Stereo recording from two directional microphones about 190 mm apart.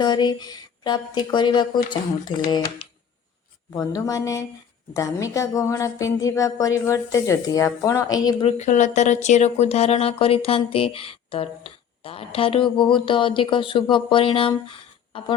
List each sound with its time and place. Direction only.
0.0 s a woman's voice: 20° left (ahead or behind)
8.4 s speech: 35° left (ahead or behind)